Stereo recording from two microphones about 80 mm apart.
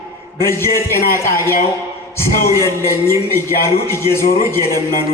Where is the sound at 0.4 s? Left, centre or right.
Left.